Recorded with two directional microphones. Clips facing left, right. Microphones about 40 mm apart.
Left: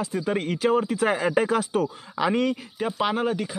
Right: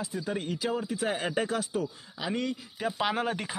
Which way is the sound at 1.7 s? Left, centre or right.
Left.